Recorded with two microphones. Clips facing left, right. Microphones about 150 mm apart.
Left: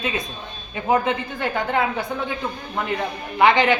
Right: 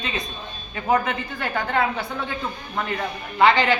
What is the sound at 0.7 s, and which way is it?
Speech, 20° left (ahead or behind).